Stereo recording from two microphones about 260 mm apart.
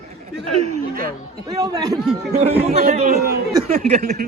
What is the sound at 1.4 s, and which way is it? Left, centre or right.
A woman's voice, centre.